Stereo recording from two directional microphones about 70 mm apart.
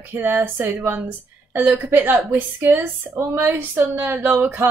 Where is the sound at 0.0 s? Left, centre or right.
Right.